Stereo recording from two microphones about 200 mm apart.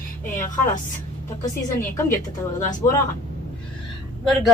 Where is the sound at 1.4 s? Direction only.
15° left (ahead or behind).